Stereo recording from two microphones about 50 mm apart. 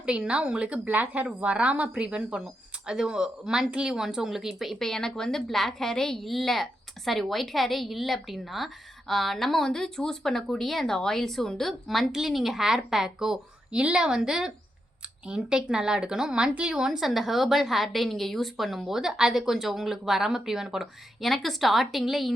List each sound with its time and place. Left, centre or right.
0.0 s a woman's voice: right; by 4.8 s centre
4.8 s a woman's voice: centre
12.1 s a woman's voice: centre
13.7 s a woman's voice: right; by 22.3 s centre